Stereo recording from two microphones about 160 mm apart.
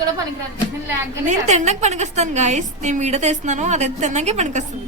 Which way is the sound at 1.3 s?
45° right (ahead or behind).